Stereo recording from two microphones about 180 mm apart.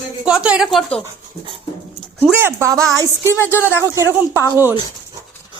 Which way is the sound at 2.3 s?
15° right (ahead or behind).